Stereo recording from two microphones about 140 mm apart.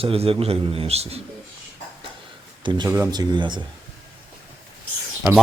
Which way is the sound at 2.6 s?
35° right (ahead or behind).